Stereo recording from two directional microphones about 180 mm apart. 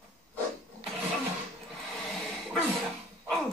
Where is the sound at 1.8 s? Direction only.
5° left (ahead or behind).